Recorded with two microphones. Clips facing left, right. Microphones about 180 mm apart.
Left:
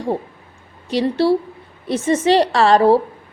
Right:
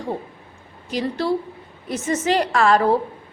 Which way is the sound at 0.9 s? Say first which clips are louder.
Left 6 dB; 30° left (ahead or behind).